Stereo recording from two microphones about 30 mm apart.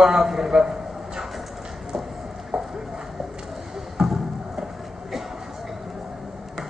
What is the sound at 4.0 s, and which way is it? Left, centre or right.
Music, centre.